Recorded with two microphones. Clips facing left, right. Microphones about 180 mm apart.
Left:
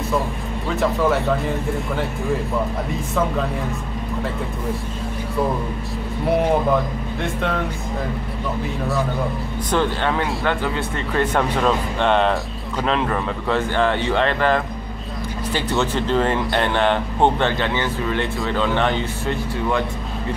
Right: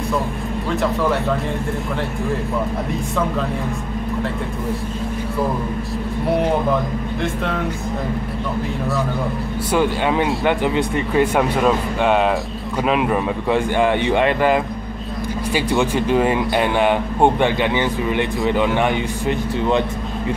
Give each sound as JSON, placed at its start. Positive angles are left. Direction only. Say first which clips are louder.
{"t": 0.7, "sound": "speech", "louder": "left 1 dB", "side_deg": 0}
{"t": 6.2, "sound": "speech", "louder": "left 1 dB", "side_deg": 0}
{"t": 9.7, "sound": "speech", "louder": "right 2 dB", "side_deg": -10}